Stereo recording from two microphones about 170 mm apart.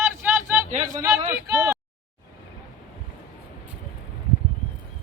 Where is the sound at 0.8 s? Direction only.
20° right (ahead or behind).